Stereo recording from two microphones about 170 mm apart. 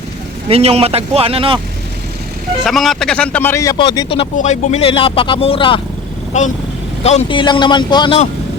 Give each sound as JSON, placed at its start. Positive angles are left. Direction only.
{"t": 0.4, "sound": "a man's voice", "side_deg": -35}
{"t": 2.6, "sound": "speech", "side_deg": 0}
{"t": 3.8, "sound": "speech", "side_deg": 25}
{"t": 4.4, "sound": "speech", "side_deg": 40}
{"t": 7.0, "sound": "speech", "side_deg": 40}